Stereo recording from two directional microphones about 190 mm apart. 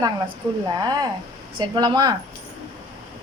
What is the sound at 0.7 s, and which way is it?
Speech, 20° right (ahead or behind).